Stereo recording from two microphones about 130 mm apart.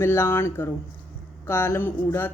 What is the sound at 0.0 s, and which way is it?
Speech, 20° left (ahead or behind).